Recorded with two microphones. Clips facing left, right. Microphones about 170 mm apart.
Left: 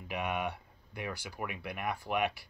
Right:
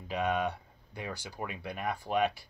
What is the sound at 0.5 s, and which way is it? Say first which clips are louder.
Speech: right 2 dB; 25° right (ahead or behind).